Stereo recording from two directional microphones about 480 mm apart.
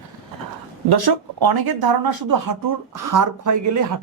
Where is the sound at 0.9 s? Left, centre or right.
Right.